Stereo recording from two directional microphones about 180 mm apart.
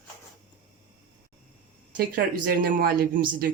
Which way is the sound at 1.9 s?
55° right (ahead or behind).